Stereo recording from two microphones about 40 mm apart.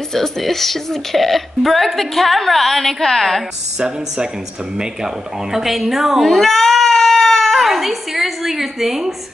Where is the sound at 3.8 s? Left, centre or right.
Centre.